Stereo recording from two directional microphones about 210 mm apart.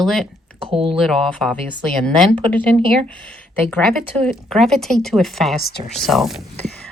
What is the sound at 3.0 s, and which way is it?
Speech, 5° left (ahead or behind).